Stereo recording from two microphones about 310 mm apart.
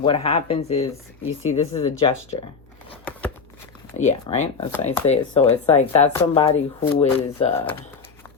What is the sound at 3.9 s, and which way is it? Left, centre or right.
Speech, left.